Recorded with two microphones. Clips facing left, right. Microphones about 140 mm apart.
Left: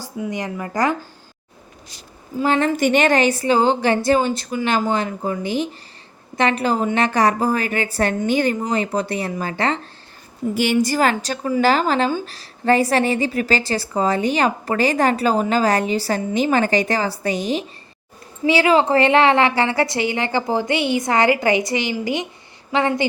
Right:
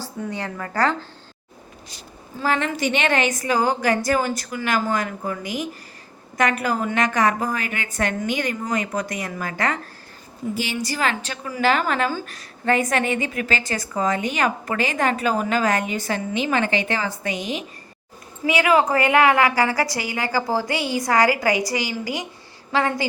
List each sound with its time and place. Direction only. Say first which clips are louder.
0.0 s a woman's voice: left 3 dB; 15° left (ahead or behind)
2.7 s a woman's voice: left 5 dB; 45° left (ahead or behind); by 9.8 s 30° left (ahead or behind)
10.5 s a woman's voice: left 9 dB; 60° left (ahead or behind)
10.9 s a woman's voice: left 6 dB; 40° left (ahead or behind); by 23.0 s 20° left (ahead or behind)